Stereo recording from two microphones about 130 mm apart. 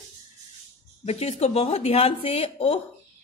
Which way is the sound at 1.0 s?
55° left (ahead or behind).